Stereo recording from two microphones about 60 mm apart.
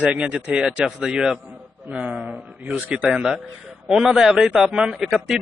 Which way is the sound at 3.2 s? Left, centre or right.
Centre.